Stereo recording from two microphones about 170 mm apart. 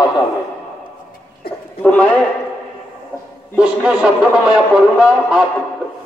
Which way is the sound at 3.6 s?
5° right (ahead or behind).